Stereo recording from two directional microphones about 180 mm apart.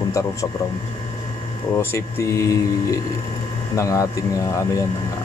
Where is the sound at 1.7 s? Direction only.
15° left (ahead or behind).